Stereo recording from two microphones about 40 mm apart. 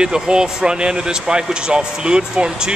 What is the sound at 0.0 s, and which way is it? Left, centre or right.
Speech, centre.